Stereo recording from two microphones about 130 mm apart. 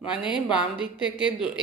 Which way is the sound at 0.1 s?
5° right (ahead or behind).